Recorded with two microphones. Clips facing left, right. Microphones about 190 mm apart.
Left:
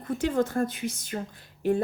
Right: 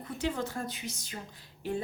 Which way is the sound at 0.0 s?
50° left (ahead or behind).